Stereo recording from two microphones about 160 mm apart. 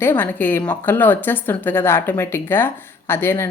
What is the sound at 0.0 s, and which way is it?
A woman's voice, 10° left (ahead or behind).